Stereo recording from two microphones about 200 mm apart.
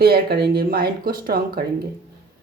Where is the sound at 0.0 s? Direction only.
50° right (ahead or behind).